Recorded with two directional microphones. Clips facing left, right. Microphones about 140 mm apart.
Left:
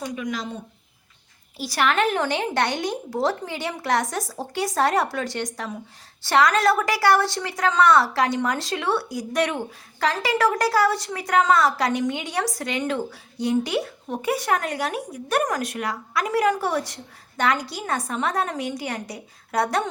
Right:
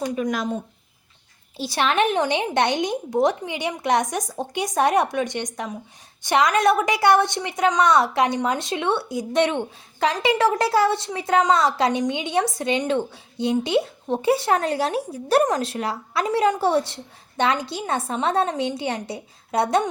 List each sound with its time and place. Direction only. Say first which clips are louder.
0.3 s speech: right 4 dB; 55° right (ahead or behind)
1.5 s a woman's voice: right 1 dB; 25° right (ahead or behind)